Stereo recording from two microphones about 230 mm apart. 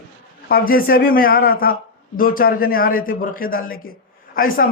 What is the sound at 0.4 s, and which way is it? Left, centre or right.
Speech, left.